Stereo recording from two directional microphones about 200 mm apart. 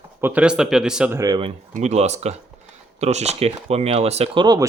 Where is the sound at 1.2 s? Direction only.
20° right (ahead or behind).